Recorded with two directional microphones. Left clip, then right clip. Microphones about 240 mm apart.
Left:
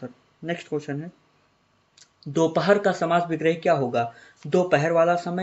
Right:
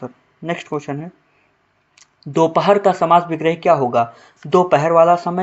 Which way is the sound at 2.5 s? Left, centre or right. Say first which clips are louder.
Right 6 dB; centre.